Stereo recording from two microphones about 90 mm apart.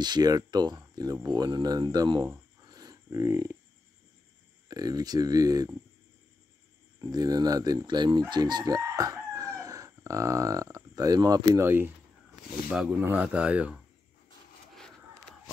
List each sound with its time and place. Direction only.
0.0 s speech: 50° right (ahead or behind)
2.6 s a sound: 45° right (ahead or behind)
4.6 s speech: 45° right (ahead or behind)
7.0 s speech: 45° right (ahead or behind)
8.3 s crowing: 55° right (ahead or behind)
11.6 s speech: 25° right (ahead or behind)
13.0 s speech: 15° right (ahead or behind)